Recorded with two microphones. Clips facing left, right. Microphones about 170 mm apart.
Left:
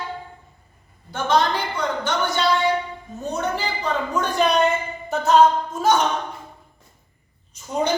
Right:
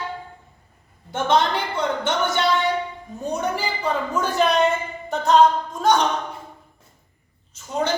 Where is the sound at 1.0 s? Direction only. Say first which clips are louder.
Even; 25° right (ahead or behind).